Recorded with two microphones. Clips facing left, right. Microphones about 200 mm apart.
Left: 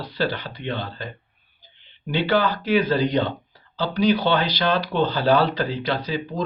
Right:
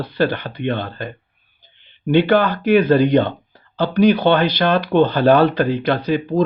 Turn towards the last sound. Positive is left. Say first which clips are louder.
# right 8 dB
turn(degrees=-60)  # may be behind; listen again after turning